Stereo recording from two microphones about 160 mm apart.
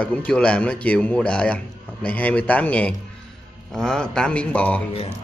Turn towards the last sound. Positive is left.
turn(degrees=35)  # may be behind; listen again after turning